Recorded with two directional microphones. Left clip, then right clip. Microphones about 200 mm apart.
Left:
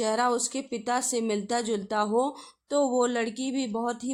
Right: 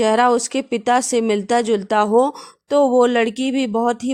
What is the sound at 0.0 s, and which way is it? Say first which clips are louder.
A woman's voice: right 11 dB; 40° right (ahead or behind).